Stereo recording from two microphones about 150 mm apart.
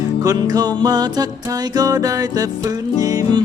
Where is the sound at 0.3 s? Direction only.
25° right (ahead or behind).